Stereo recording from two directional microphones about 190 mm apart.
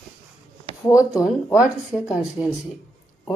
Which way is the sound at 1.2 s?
5° right (ahead or behind).